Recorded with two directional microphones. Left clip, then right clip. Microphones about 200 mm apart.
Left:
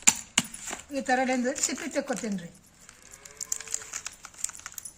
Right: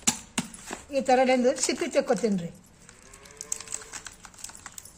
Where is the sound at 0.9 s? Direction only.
35° right (ahead or behind).